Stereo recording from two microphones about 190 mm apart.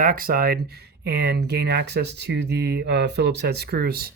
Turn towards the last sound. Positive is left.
turn(degrees=-55)  # may be behind; listen again after turning